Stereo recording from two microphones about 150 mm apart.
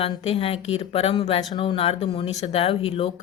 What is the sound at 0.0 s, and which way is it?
Speech, 40° left (ahead or behind).